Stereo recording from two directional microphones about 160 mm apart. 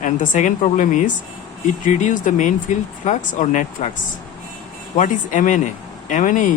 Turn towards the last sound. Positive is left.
turn(degrees=55)  # may be behind; listen again after turning